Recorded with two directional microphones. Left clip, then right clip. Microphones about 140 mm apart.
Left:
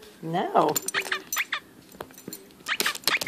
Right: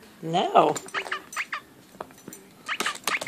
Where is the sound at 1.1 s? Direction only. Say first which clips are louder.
Left 2 dB; 50° left (ahead or behind).